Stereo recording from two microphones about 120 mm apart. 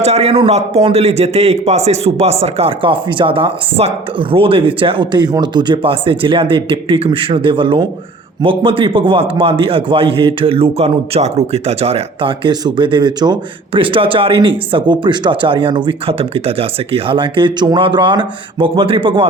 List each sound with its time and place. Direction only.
0.0 s a man's voice: 60° right (ahead or behind)